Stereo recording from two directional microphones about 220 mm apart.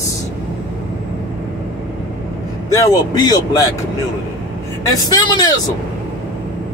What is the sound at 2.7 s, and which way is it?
Speech, 15° left (ahead or behind).